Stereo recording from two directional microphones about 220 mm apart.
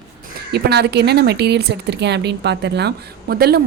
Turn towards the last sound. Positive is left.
turn(degrees=-45)  # may be behind; listen again after turning